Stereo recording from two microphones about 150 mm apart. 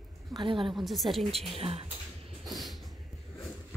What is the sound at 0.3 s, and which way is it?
Speech, 35° right (ahead or behind).